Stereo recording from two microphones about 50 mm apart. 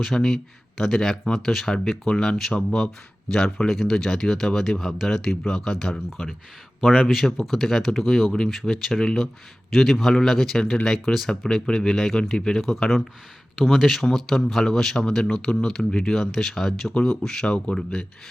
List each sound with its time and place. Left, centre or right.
0.0 s speech: centre
13.6 s speech: centre
17.4 s speech: left